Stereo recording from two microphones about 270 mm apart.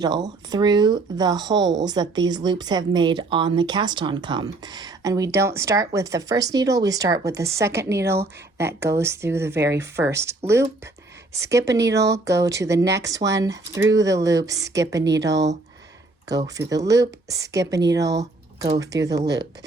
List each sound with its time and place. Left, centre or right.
0.0 s speech: centre
15.3 s speech: right
16.6 s speech: centre